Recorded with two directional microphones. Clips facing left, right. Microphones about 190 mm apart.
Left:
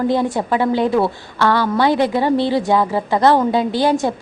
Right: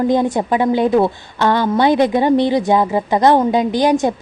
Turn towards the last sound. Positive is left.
turn(degrees=-15)  # may be behind; listen again after turning